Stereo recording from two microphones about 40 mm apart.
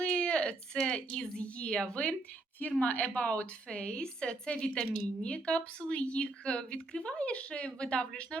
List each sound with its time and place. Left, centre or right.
0.0 s a sound: left
0.7 s a woman's voice: centre
2.8 s a woman's voice: left